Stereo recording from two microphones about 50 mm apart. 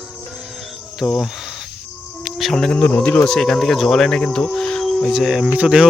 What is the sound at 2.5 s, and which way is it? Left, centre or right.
Speech, centre.